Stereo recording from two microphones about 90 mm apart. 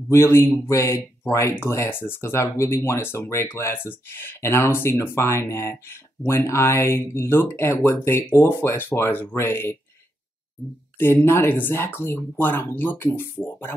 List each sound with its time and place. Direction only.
0.1 s speech: 30° left (ahead or behind)
11.0 s speech: 25° left (ahead or behind)